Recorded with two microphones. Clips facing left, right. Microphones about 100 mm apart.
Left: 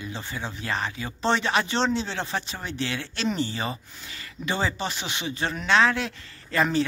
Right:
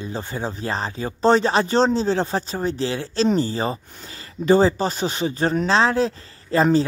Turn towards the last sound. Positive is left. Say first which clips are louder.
# right 6 dB
turn(degrees=-35)  # may be behind; listen again after turning